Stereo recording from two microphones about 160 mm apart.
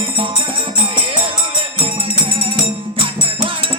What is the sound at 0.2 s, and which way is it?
Music, 30° right (ahead or behind).